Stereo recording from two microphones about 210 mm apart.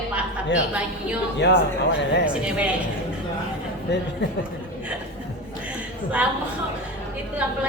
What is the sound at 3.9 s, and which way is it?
Speech, 55° left (ahead or behind).